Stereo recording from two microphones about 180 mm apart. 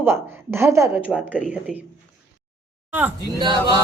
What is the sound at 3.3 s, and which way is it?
Speech, 25° right (ahead or behind).